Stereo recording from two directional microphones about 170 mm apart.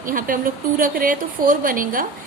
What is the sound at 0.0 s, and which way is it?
A woman's voice, 55° right (ahead or behind).